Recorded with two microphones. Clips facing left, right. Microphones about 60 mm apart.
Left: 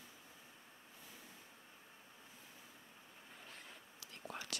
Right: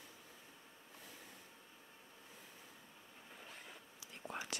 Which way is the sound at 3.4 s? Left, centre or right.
Centre.